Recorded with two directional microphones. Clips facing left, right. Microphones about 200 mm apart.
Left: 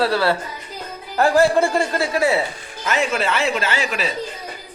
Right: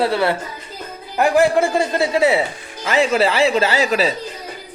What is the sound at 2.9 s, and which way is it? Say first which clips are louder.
Speech: right 5 dB; 35° right (ahead or behind).